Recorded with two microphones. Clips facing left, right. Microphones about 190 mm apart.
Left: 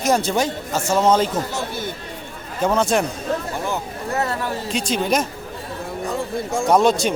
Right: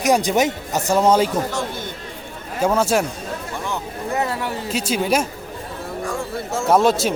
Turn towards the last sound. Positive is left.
turn(degrees=-5)  # may be behind; listen again after turning